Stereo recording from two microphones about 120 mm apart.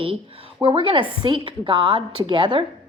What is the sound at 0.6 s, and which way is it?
A woman's voice, 45° right (ahead or behind).